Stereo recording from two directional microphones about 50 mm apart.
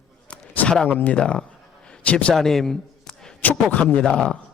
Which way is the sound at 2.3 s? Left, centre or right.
Centre.